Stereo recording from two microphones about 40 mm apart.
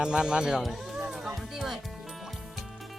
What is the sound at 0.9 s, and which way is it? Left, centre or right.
Music, centre.